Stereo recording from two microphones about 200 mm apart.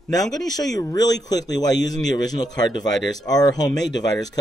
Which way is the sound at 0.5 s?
20° left (ahead or behind).